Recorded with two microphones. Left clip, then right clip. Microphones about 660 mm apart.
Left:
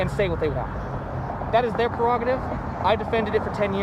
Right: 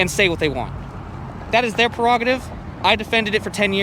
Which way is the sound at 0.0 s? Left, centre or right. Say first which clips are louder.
Right 6 dB; right.